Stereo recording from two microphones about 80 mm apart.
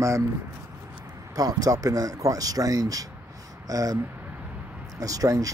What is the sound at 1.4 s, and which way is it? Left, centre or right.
A man's voice, right.